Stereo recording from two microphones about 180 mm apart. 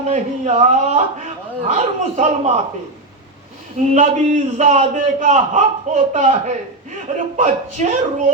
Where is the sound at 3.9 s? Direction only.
40° right (ahead or behind).